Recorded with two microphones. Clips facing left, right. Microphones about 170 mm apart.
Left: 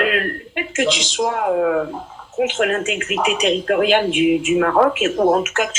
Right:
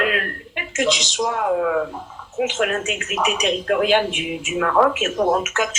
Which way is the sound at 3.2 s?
30° left (ahead or behind).